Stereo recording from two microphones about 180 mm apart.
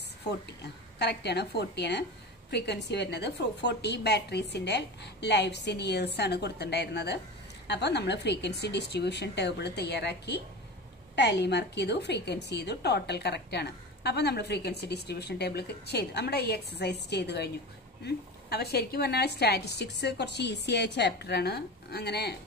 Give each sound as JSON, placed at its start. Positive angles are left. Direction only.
{"t": 0.5, "sound": "a woman's voice", "side_deg": 70}